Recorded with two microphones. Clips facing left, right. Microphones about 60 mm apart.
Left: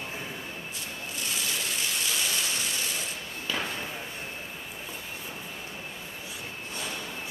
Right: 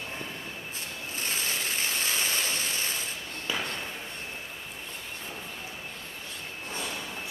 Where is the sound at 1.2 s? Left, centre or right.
Right.